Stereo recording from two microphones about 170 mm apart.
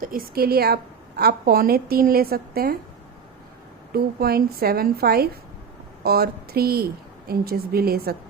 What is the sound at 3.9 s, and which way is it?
A woman's voice, 65° right (ahead or behind).